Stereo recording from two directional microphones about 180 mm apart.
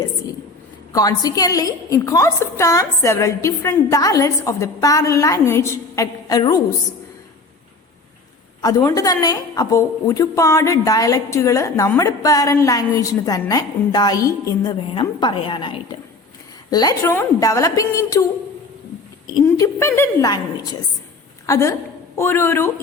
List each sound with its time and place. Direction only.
0.9 s a woman's voice: 20° left (ahead or behind)
8.6 s a woman's voice: 20° left (ahead or behind)
19.5 s a woman's voice: 15° left (ahead or behind)
21.4 s a woman's voice: 15° left (ahead or behind)